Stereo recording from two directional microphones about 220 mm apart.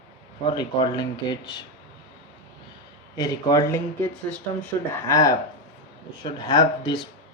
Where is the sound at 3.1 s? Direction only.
15° left (ahead or behind).